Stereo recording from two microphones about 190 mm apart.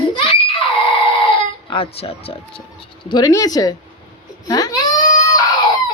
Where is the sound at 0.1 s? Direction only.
25° left (ahead or behind).